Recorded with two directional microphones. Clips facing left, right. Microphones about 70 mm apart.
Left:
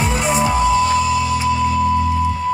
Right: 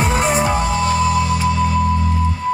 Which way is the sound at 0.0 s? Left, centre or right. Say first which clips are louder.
Right 1 dB; right.